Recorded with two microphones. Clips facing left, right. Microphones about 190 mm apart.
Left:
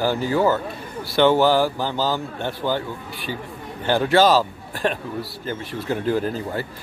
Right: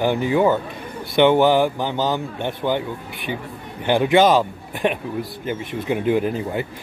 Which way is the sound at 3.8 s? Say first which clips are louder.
Right 2 dB; 15° right (ahead or behind).